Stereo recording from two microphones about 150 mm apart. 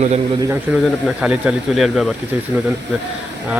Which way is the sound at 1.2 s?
5° right (ahead or behind).